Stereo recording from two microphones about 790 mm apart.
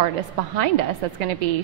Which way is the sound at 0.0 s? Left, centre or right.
Right.